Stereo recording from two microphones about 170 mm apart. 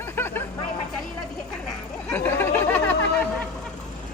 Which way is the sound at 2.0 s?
10° left (ahead or behind).